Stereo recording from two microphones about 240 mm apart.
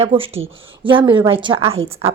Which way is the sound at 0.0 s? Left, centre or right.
Right.